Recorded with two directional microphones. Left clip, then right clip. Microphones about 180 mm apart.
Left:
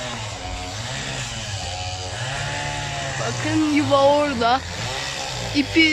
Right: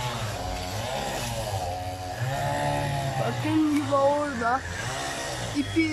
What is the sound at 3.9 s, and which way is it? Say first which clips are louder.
Speech: left 7 dB; 15° left (ahead or behind).